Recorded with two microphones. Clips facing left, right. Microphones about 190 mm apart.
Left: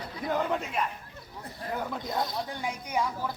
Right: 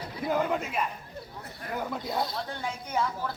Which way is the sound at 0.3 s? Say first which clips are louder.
Right 1 dB; 5° right (ahead or behind).